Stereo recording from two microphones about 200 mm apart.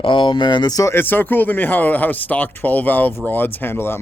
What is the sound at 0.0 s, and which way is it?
Speech, 25° left (ahead or behind).